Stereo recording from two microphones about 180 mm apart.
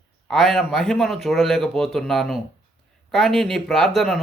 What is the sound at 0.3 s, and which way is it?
Speech, centre (ahead or behind).